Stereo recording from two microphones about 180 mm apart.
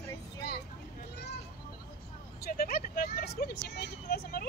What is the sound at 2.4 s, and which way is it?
Speech, 55° left (ahead or behind).